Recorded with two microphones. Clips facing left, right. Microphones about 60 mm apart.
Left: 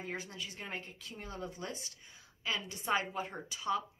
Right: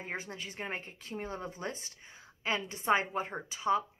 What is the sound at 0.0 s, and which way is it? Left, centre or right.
A woman's voice, right.